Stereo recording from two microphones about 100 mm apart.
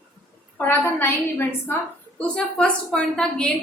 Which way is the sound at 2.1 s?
10° left (ahead or behind).